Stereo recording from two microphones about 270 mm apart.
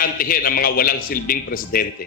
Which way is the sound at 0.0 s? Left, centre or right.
Left.